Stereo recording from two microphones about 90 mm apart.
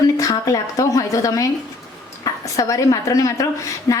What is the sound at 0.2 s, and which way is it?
A woman's voice, 40° left (ahead or behind).